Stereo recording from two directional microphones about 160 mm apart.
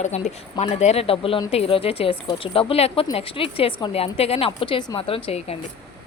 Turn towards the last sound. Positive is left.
turn(degrees=40)  # may be behind; listen again after turning